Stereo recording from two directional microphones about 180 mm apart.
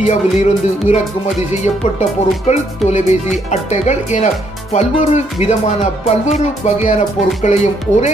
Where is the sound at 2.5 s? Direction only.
40° left (ahead or behind).